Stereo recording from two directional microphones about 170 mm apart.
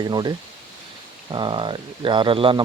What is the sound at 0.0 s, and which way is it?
Speech, 25° right (ahead or behind).